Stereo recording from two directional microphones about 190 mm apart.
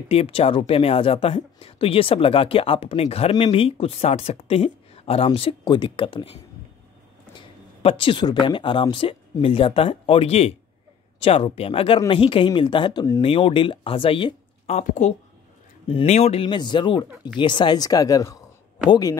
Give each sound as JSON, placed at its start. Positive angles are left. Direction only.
{"t": 0.1, "sound": "speech", "side_deg": 30}
{"t": 7.3, "sound": "speech", "side_deg": 25}
{"t": 14.8, "sound": "speech", "side_deg": 40}